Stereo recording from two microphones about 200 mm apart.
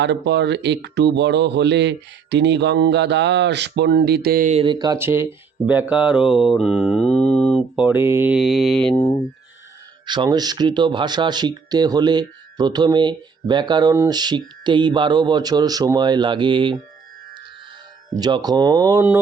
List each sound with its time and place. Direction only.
0.0 s speech: 60° right (ahead or behind); by 4.6 s 40° right (ahead or behind)
4.6 s speech: 20° right (ahead or behind); by 6.3 s 5° right (ahead or behind)
6.5 s mantra: centre (ahead or behind)
9.0 s speech: 20° left (ahead or behind)
10.1 s speech: 20° right (ahead or behind)
18.2 s speech: 20° right (ahead or behind)